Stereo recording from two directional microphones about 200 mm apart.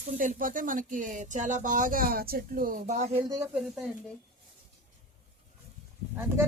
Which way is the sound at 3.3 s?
10° right (ahead or behind).